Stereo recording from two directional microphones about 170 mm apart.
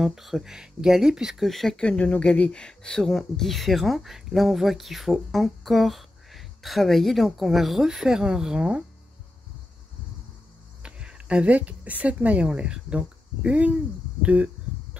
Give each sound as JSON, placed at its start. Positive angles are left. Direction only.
{"t": 0.0, "sound": "speech", "side_deg": 0}
{"t": 10.8, "sound": "speech", "side_deg": -5}